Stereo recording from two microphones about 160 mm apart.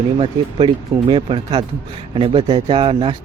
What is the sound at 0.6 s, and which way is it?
A man's voice, 30° right (ahead or behind).